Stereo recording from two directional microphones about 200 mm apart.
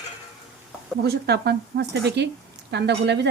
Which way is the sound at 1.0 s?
55° right (ahead or behind).